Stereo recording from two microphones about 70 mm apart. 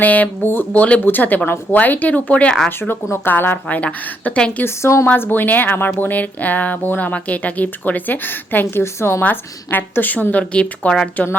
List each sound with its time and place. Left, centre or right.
0.0 s speech: left
4.6 s a woman's voice: left
5.0 s speech: left
9.2 s speech: left; by 11.1 s centre